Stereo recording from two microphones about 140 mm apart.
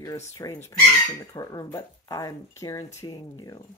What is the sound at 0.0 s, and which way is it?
Speech, 20° left (ahead or behind).